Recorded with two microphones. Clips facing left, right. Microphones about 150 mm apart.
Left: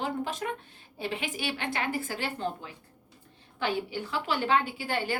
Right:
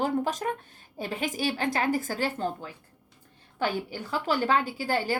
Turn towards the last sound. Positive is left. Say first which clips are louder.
# right 3 dB
turn(degrees=-40)  # may be behind; listen again after turning